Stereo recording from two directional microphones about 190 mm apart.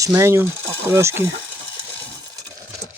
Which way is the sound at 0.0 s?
15° right (ahead or behind).